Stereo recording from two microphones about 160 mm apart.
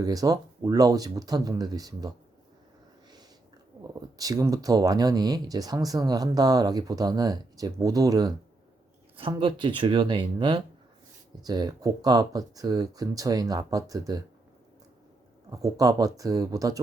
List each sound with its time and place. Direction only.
0.0 s speech: 20° right (ahead or behind)
4.2 s speech: 20° right (ahead or behind)
9.3 s speech: 30° right (ahead or behind)
15.4 s speech: 20° right (ahead or behind)